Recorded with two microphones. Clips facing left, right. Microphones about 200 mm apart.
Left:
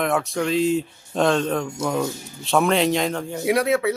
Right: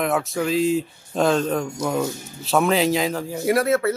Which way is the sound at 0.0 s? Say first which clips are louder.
Even; centre (ahead or behind).